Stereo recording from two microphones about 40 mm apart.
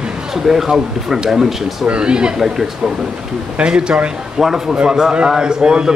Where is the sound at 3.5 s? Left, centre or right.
Right.